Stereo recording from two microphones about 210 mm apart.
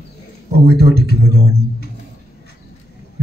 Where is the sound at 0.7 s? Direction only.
50° right (ahead or behind).